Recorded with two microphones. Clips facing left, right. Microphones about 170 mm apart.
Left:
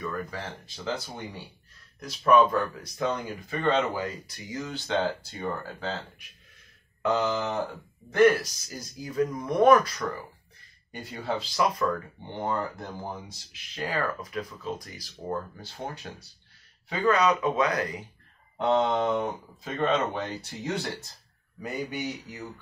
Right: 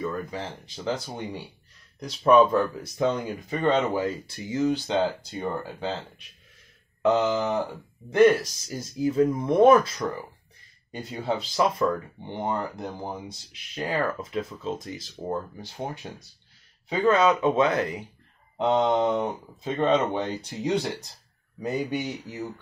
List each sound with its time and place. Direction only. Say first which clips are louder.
0.0 s speech: right 3 dB; 20° right (ahead or behind)